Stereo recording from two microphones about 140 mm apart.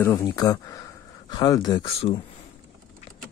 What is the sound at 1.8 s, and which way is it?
Speech, 45° left (ahead or behind).